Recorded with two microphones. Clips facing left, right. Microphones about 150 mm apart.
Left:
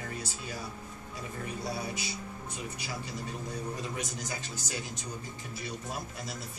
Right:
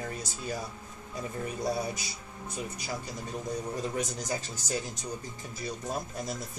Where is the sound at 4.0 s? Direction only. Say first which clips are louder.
Right 5 dB; 40° right (ahead or behind).